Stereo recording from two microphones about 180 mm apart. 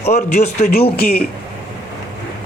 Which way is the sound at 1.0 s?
55° left (ahead or behind).